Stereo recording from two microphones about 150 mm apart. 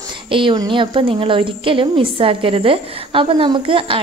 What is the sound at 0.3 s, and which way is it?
Speech, 35° right (ahead or behind).